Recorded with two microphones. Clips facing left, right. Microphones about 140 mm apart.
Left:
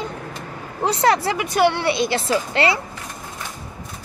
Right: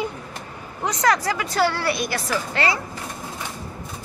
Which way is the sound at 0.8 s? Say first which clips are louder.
Left 3 dB; 25° left (ahead or behind).